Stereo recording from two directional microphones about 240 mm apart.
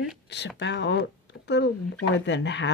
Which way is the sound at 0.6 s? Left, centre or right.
Left.